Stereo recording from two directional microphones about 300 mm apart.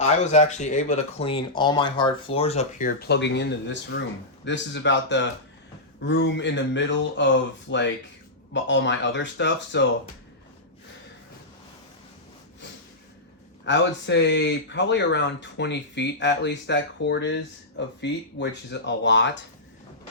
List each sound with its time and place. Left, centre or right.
0.0 s speech: left
13.7 s speech: left